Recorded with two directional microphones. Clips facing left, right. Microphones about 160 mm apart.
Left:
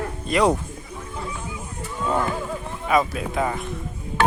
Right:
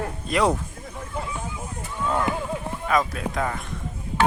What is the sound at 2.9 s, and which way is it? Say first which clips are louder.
Speech: left 3 dB; 5° left (ahead or behind).